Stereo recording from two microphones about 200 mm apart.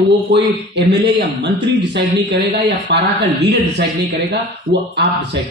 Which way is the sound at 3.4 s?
60° right (ahead or behind).